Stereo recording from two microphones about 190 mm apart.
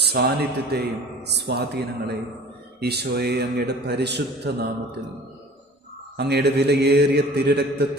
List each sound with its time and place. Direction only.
0.0 s a sound: 60° right (ahead or behind)
0.7 s a man's voice: 60° right (ahead or behind)
6.1 s a man's voice: 60° right (ahead or behind)